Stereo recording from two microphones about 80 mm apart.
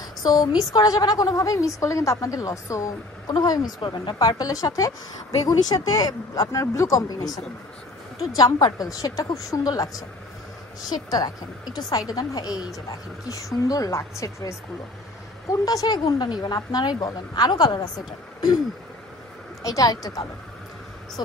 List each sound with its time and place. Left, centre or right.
0.0 s a woman's voice: left
3.8 s a woman's voice: left
13.3 s a woman's voice: left
19.6 s a woman's voice: left